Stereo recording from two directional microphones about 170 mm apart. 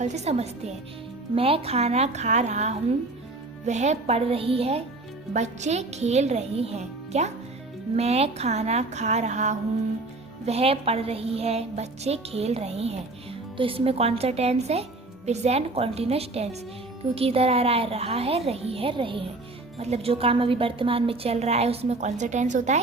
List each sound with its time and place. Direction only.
0.0 s a woman's voice: 40° right (ahead or behind)